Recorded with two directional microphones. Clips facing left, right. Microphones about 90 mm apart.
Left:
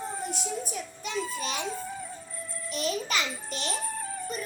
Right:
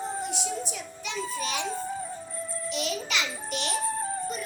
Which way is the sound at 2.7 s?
40° left (ahead or behind).